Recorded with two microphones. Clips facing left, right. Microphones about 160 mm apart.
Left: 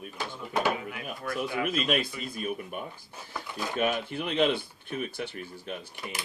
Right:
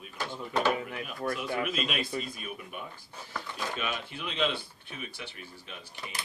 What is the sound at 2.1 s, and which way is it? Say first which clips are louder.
Speech: right 4 dB; 40° right (ahead or behind).